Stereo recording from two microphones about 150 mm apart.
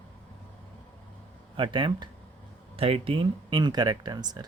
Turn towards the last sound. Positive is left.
turn(degrees=-25)  # may be behind; listen again after turning